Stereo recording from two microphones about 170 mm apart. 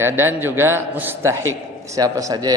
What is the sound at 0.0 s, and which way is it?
A man's voice, 15° right (ahead or behind).